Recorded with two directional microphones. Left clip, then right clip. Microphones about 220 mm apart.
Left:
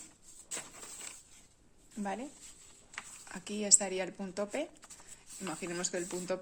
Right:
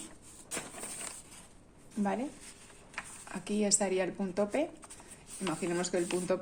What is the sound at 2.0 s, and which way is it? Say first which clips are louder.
A woman's voice: right 5 dB; 15° left (ahead or behind).